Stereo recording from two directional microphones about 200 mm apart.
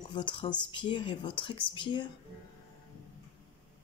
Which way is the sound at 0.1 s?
25° left (ahead or behind).